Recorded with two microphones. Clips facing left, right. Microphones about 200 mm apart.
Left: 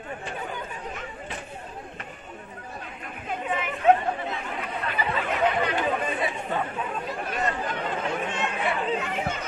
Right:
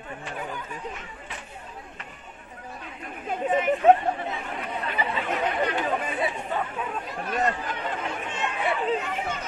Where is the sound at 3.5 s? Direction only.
40° right (ahead or behind).